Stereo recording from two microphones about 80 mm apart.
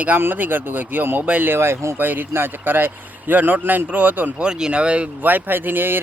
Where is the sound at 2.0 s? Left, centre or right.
Right.